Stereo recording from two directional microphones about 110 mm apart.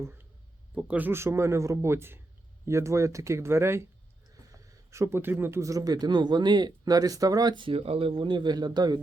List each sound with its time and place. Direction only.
0.8 s speech: 10° right (ahead or behind)
4.9 s speech: 25° right (ahead or behind); by 9.0 s 40° right (ahead or behind)